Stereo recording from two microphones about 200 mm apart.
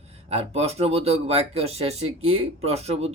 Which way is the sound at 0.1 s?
30° right (ahead or behind).